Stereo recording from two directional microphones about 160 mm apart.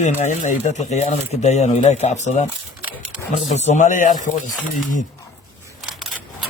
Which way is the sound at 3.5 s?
45° left (ahead or behind).